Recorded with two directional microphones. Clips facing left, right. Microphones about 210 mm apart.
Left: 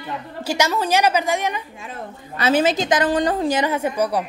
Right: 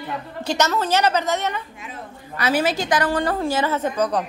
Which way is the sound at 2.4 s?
20° left (ahead or behind).